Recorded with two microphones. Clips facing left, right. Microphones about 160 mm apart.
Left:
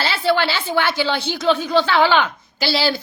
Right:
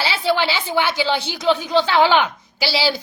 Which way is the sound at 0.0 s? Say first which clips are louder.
Left 1 dB; 15° right (ahead or behind).